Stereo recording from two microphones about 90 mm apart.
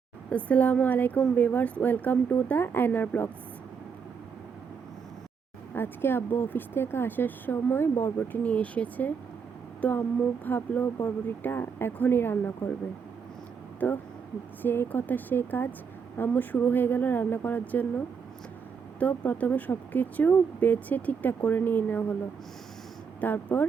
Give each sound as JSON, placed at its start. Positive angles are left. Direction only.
{"t": 0.3, "sound": "a woman's voice", "side_deg": 15}
{"t": 5.7, "sound": "speech", "side_deg": 25}
{"t": 8.4, "sound": "a woman's voice", "side_deg": 15}
{"t": 13.7, "sound": "speech", "side_deg": 20}
{"t": 18.9, "sound": "speech", "side_deg": 15}
{"t": 23.2, "sound": "speech", "side_deg": 20}